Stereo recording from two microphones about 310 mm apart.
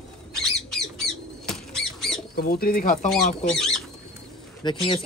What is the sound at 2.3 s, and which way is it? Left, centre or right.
Speech, left.